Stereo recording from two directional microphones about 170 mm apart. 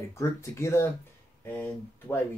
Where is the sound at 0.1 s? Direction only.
15° left (ahead or behind).